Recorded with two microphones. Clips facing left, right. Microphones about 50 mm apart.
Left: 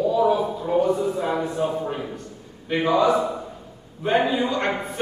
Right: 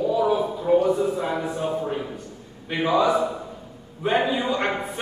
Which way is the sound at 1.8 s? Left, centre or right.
Centre.